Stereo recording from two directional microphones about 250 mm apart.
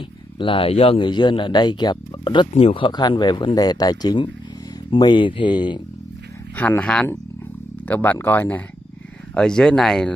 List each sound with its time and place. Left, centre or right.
0.4 s speech: left
6.5 s speech: centre